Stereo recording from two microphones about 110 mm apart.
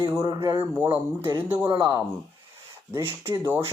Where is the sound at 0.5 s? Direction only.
20° right (ahead or behind).